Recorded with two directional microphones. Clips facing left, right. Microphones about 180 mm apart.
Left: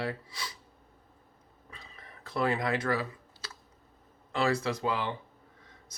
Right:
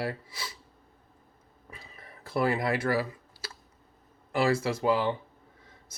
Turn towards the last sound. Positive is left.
turn(degrees=-30)  # may be behind; listen again after turning